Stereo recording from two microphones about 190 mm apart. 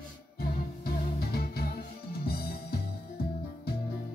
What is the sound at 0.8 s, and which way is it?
Music, 55° left (ahead or behind).